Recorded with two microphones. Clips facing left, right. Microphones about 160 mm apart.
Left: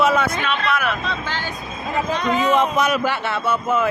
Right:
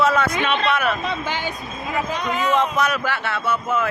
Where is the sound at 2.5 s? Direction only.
15° left (ahead or behind).